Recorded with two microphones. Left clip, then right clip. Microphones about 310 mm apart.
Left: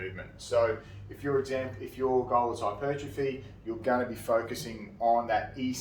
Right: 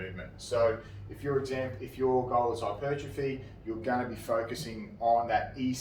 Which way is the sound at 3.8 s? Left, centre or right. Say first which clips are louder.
Left 3 dB; centre.